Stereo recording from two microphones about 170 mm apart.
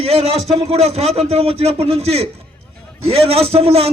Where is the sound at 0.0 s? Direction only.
35° right (ahead or behind).